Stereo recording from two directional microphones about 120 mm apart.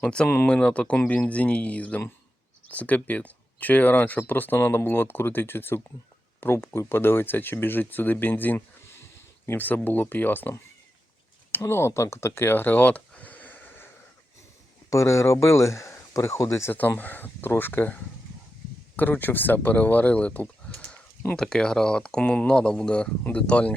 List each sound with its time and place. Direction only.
0.0 s speech: 10° left (ahead or behind)
14.8 s speech: 25° left (ahead or behind)